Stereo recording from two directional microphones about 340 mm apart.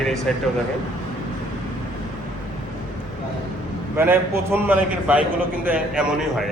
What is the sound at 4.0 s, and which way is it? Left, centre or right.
A man's voice, centre.